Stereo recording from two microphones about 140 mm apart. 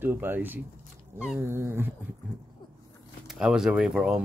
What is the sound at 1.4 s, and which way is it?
Dog, 20° right (ahead or behind).